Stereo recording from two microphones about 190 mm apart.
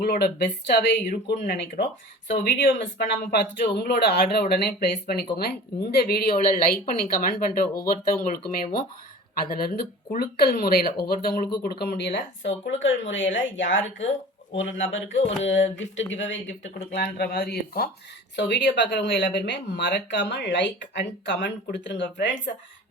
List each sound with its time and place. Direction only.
0.0 s speech: 55° left (ahead or behind); by 2.9 s 70° left (ahead or behind)
3.3 s speech: 60° left (ahead or behind)
18.3 s speech: 65° left (ahead or behind)